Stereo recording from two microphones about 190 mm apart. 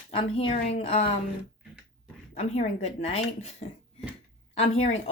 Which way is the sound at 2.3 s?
35° left (ahead or behind).